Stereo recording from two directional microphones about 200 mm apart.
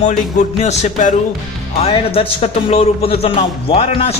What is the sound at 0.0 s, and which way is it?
A man's voice, 35° left (ahead or behind).